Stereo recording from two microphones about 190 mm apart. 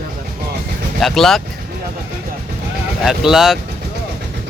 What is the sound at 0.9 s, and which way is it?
Speech, centre (ahead or behind).